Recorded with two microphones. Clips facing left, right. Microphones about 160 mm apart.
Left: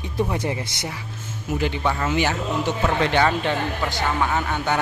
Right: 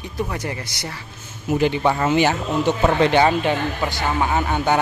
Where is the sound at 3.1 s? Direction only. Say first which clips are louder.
Right 3 dB; 15° right (ahead or behind).